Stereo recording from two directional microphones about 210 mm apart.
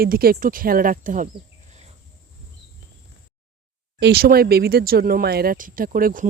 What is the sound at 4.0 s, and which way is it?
Speech, 50° right (ahead or behind).